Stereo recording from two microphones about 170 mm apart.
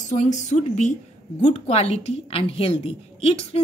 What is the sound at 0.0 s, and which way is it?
A woman's voice, 45° left (ahead or behind).